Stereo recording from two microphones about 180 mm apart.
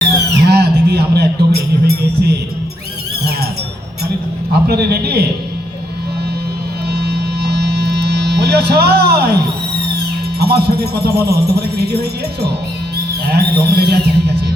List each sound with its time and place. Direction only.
0.4 s music: 65° right (ahead or behind)
4.7 s a man's voice: 65° right (ahead or behind)
6.9 s hum: 65° right (ahead or behind)
10.4 s a man's voice: 65° right (ahead or behind)
13.3 s a man's voice: 65° right (ahead or behind)